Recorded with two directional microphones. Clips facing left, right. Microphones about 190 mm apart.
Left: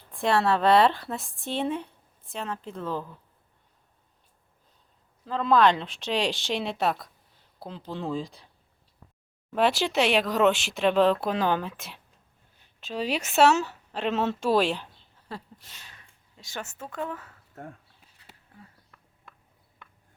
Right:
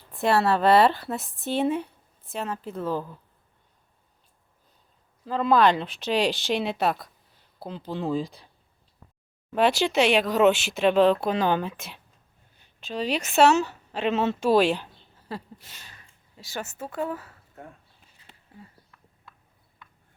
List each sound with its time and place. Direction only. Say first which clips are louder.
0.1 s speech: right 2 dB; 5° right (ahead or behind)
5.2 s speech: right 1 dB; 5° right (ahead or behind)
9.5 s a woman's voice: right 2 dB; centre (ahead or behind)
18.5 s a sound: right 4 dB; centre (ahead or behind)